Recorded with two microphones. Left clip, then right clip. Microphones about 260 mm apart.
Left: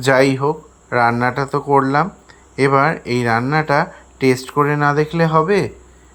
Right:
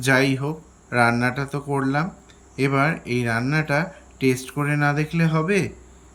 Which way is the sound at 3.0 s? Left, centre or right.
Left.